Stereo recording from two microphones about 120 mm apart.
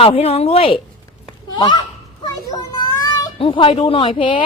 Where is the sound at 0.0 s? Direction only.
55° left (ahead or behind).